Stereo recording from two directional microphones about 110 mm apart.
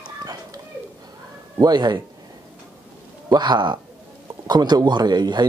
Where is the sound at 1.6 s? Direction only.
40° right (ahead or behind).